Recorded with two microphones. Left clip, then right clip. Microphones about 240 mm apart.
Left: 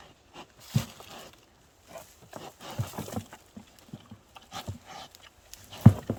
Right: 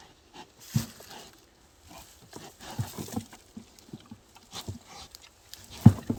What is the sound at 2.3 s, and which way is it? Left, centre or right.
Horse, centre.